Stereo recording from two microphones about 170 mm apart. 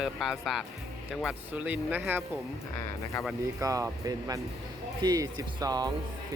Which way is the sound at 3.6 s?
20° right (ahead or behind).